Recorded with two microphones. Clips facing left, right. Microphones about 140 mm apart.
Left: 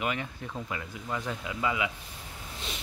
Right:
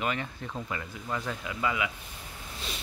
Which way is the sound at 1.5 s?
20° left (ahead or behind).